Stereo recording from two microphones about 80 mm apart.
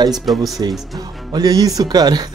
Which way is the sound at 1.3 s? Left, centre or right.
Right.